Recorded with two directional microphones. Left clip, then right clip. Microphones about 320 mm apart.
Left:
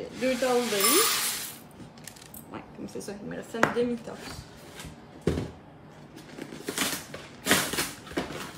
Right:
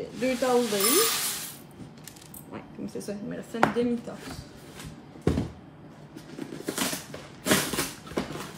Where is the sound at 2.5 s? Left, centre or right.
Centre.